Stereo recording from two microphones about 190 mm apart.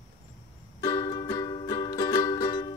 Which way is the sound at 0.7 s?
20° left (ahead or behind).